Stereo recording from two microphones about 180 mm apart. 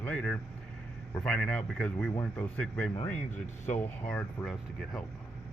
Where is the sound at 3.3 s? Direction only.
45° left (ahead or behind).